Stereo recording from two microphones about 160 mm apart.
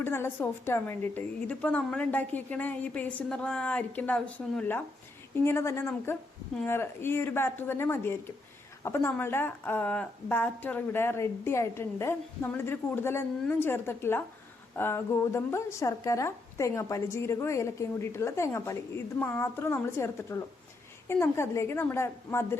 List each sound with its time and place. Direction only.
0.0 s a woman's voice: 15° left (ahead or behind)